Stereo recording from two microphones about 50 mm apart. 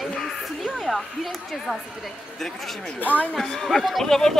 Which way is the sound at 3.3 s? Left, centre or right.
Centre.